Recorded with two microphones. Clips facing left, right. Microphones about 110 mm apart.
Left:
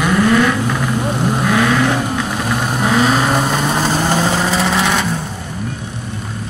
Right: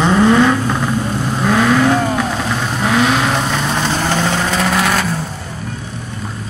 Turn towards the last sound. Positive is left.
turn(degrees=0)  # may be behind; listen again after turning